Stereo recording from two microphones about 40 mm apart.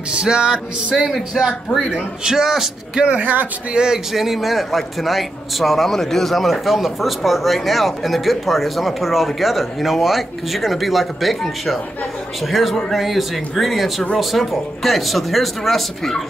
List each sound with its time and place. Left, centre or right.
0.1 s music: right
0.9 s a man's voice: centre
3.1 s a man's voice: right
3.7 s music: centre
4.1 s a man's voice: centre